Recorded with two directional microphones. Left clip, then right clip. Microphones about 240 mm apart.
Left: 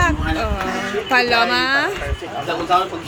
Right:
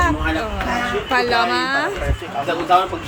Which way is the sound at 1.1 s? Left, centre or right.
Centre.